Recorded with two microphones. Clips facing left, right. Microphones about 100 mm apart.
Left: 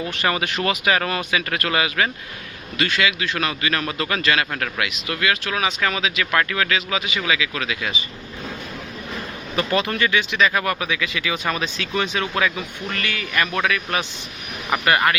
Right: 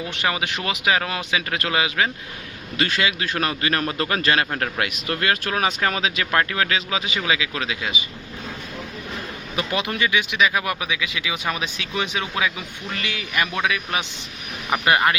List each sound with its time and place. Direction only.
0.1 s speech: 15° right (ahead or behind)
2.7 s speech: 35° right (ahead or behind)
9.6 s speech: 15° right (ahead or behind)